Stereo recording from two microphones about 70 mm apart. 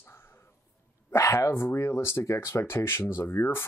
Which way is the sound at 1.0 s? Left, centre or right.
Left.